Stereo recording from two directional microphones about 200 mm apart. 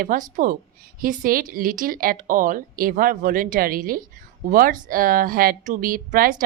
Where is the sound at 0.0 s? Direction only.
45° right (ahead or behind).